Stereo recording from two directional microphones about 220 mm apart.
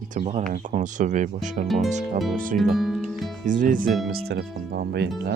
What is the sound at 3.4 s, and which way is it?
Speech, 35° right (ahead or behind).